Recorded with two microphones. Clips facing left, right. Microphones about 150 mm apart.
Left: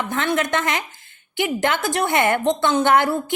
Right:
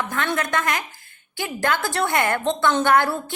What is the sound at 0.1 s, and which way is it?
A woman's voice, 20° left (ahead or behind).